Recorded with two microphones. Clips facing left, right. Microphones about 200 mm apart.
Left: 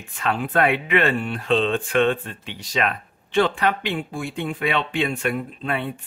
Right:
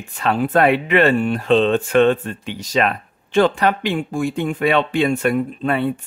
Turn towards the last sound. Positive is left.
turn(degrees=-40)  # may be behind; listen again after turning